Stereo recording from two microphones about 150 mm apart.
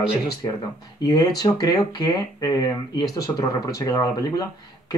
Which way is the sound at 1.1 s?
25° left (ahead or behind).